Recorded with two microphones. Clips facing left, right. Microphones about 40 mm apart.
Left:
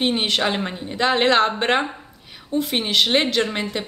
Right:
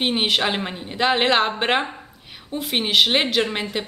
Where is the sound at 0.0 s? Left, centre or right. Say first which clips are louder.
Even; centre.